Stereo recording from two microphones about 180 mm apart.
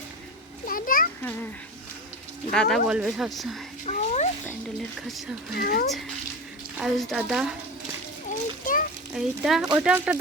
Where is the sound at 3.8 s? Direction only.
40° left (ahead or behind).